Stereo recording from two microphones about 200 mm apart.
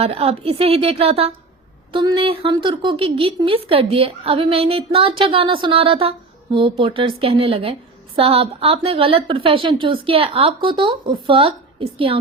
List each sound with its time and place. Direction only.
0.0 s speech: 30° right (ahead or behind)